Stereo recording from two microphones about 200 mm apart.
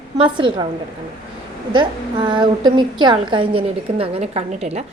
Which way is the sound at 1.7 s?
25° right (ahead or behind).